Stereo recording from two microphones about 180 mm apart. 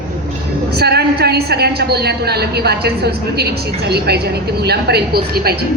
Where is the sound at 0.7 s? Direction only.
65° right (ahead or behind).